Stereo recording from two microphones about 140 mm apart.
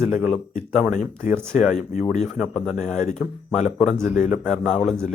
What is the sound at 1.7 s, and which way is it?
Speech, 55° left (ahead or behind).